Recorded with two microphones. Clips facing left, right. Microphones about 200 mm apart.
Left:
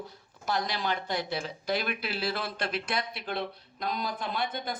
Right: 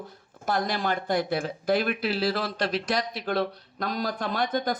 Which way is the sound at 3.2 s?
45° right (ahead or behind).